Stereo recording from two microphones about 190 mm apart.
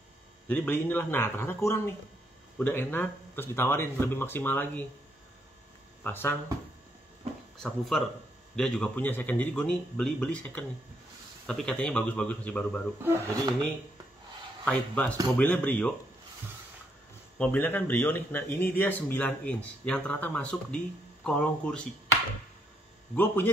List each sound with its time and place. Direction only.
0.5 s speech: 10° left (ahead or behind)
6.0 s speech: 10° left (ahead or behind)
7.2 s a sound: 35° right (ahead or behind)
7.6 s speech: centre (ahead or behind)
14.6 s speech: 5° left (ahead or behind)
17.4 s speech: 10° left (ahead or behind)
23.1 s speech: 10° left (ahead or behind)